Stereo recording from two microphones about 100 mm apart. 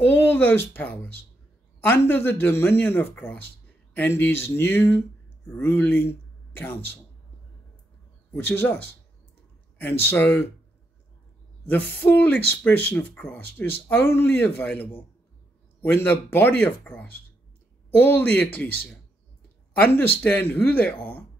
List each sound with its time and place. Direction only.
0.0 s speech: 20° left (ahead or behind)
8.3 s speech: 20° left (ahead or behind)
11.6 s speech: 20° left (ahead or behind)
19.8 s speech: 20° left (ahead or behind)